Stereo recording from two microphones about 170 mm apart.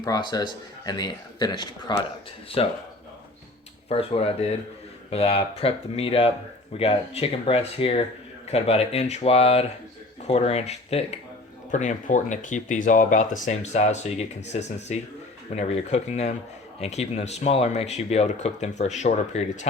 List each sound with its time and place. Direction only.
0.0 s speech: 25° left (ahead or behind)
3.8 s speech: 35° left (ahead or behind)